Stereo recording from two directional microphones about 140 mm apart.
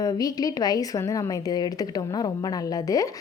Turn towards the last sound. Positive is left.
turn(degrees=25)  # may be behind; listen again after turning